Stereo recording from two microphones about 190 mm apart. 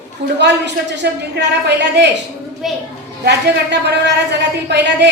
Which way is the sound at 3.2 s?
65° right (ahead or behind).